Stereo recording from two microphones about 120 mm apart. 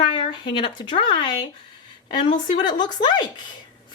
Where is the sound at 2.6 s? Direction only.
35° left (ahead or behind).